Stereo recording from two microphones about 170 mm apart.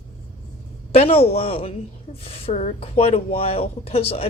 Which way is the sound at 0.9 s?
35° left (ahead or behind).